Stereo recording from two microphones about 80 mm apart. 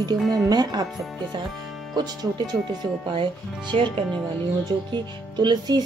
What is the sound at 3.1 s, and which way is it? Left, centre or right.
Speech, right.